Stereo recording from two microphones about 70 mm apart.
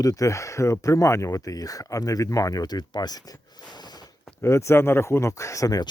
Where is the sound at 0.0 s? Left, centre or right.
Left.